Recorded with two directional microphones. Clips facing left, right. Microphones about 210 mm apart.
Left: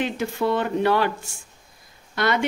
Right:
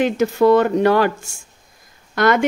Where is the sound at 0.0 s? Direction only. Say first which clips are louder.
Right 9 dB; 45° right (ahead or behind).